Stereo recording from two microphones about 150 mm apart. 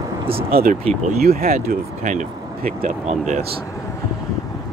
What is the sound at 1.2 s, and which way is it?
Speech, 80° right.